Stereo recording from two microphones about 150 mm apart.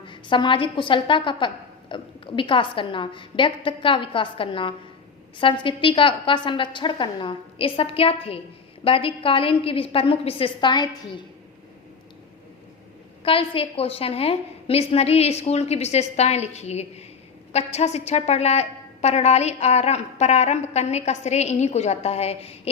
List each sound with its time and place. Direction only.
0.0 s a woman's voice: 30° left (ahead or behind)
13.2 s a woman's voice: 35° left (ahead or behind)